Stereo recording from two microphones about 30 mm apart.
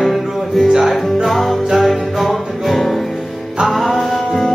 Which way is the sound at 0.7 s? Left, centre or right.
Centre.